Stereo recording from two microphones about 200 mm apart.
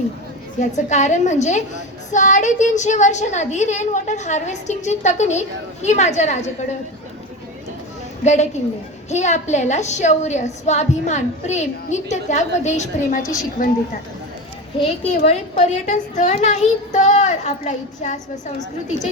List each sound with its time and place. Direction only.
0.6 s a woman's voice: 35° left (ahead or behind)
8.2 s a woman's voice: 35° left (ahead or behind)
15.2 s a woman's voice: 35° left (ahead or behind)